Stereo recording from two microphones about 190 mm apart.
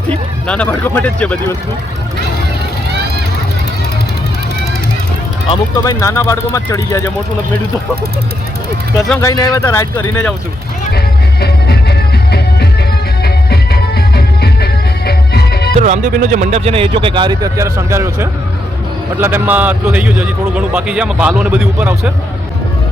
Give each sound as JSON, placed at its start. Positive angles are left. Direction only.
{"t": 0.1, "sound": "speech", "side_deg": 5}
{"t": 5.7, "sound": "speech", "side_deg": 20}
{"t": 9.0, "sound": "speech", "side_deg": 15}
{"t": 10.9, "sound": "music", "side_deg": 55}
{"t": 15.8, "sound": "a man's voice", "side_deg": -40}